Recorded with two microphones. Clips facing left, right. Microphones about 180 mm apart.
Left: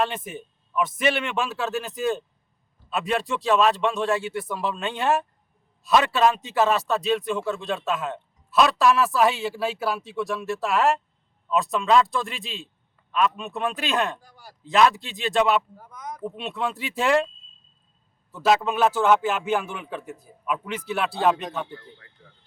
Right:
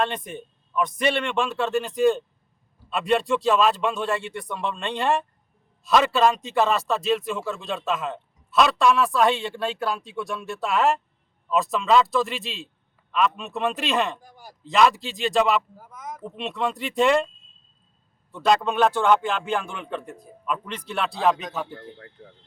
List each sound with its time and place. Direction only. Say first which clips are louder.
0.0 s a man's voice: even; 5° left (ahead or behind)
14.2 s speech: right 3 dB; 15° right (ahead or behind)
14.6 s a man's voice: even; centre (ahead or behind)
18.3 s a man's voice: even; 5° left (ahead or behind)
21.8 s speech: right 8 dB; 50° right (ahead or behind)